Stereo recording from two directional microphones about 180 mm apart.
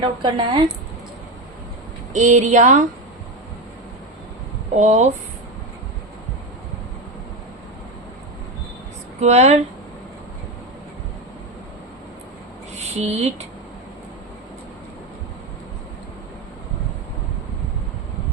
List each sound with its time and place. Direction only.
0.0 s speech: 25° right (ahead or behind)
2.1 s speech: 40° right (ahead or behind)
4.8 s speech: 40° right (ahead or behind)
9.2 s speech: 35° right (ahead or behind)
13.0 s speech: 35° right (ahead or behind)